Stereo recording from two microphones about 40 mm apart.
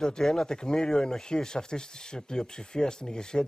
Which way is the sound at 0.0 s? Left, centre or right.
Centre.